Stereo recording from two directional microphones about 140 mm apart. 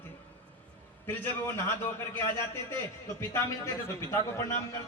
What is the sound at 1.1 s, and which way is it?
A man's voice, 15° left (ahead or behind).